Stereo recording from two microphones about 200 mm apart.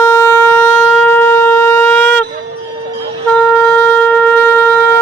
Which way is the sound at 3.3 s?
5° left (ahead or behind).